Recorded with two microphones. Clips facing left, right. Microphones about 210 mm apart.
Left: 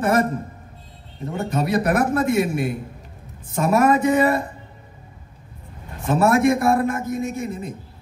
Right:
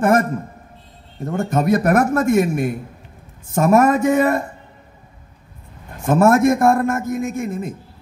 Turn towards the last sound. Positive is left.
turn(degrees=-50)  # may be behind; listen again after turning